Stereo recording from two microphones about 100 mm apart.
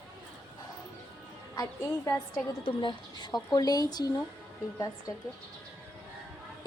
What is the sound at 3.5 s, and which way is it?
Speech, 40° left (ahead or behind).